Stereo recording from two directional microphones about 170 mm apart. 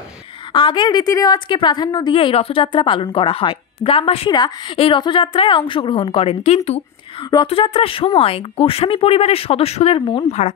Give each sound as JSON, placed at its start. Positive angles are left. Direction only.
{"t": 0.5, "sound": "a woman's voice", "side_deg": 30}